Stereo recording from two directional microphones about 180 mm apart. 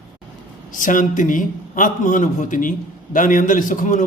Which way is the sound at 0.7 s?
45° left (ahead or behind).